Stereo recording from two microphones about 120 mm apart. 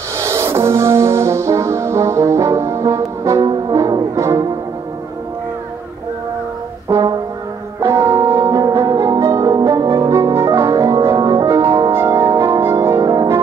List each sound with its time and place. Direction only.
0.2 s music: 25° right (ahead or behind)
6.9 s brass instrument: 30° right (ahead or behind)
7.9 s music: 25° right (ahead or behind)